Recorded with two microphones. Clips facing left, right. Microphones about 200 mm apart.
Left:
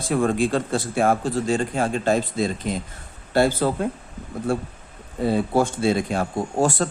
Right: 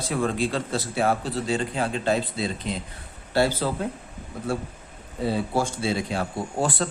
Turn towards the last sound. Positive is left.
turn(degrees=45)  # may be behind; listen again after turning